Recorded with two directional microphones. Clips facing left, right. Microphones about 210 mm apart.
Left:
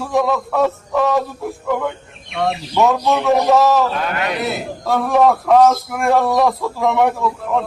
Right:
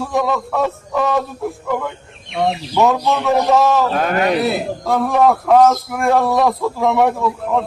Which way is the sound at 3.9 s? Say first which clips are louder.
Right 5 dB; 45° right (ahead or behind).